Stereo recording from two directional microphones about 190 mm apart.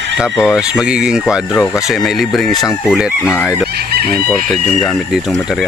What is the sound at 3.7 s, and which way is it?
Chicken, 55° right (ahead or behind).